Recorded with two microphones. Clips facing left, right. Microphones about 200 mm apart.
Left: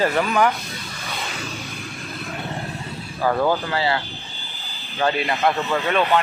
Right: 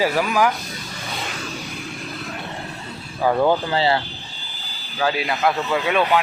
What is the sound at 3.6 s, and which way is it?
Speech, 25° right (ahead or behind).